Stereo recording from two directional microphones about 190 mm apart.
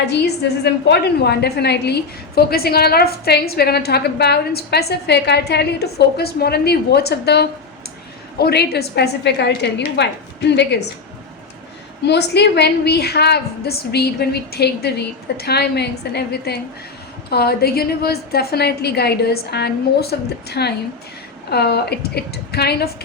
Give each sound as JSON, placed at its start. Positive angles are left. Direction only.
{"t": 0.6, "sound": "a woman's voice", "side_deg": 60}
{"t": 12.0, "sound": "a woman's voice", "side_deg": 60}